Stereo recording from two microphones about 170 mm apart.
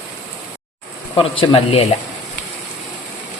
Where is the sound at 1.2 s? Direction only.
30° left (ahead or behind).